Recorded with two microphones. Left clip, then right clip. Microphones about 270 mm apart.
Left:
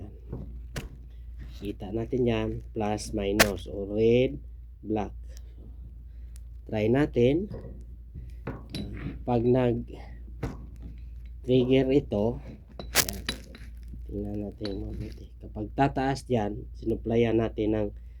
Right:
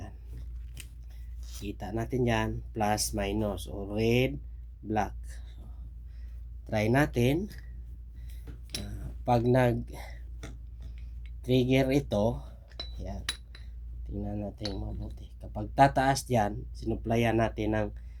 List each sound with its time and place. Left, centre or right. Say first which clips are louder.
1.6 s speech: left 2 dB; centre
6.7 s speech: left 1 dB; centre
9.2 s speech: left 1 dB; centre
11.4 s speech: left 3 dB; centre
12.7 s a sound: right 3 dB; centre
14.2 s speech: left 2 dB; centre